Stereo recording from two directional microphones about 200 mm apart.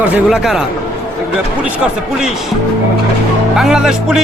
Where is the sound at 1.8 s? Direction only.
5° right (ahead or behind).